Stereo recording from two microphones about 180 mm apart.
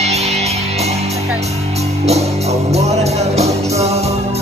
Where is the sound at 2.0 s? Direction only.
35° right (ahead or behind).